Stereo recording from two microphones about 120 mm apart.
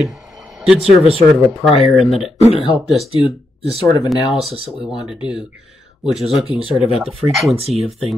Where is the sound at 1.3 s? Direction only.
Centre (ahead or behind).